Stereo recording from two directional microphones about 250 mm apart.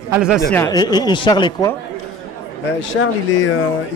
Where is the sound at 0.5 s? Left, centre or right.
Centre.